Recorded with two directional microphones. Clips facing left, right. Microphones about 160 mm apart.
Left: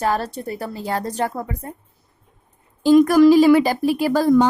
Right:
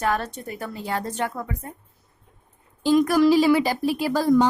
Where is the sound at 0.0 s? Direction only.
35° left (ahead or behind).